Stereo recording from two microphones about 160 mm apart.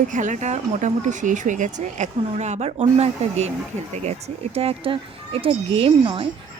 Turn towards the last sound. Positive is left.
turn(degrees=-35)  # may be behind; listen again after turning